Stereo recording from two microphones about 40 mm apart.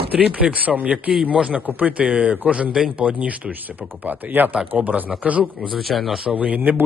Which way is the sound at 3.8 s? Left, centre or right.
Right.